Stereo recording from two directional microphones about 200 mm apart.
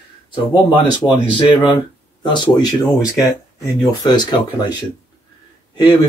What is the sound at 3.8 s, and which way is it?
Speech, 20° left (ahead or behind).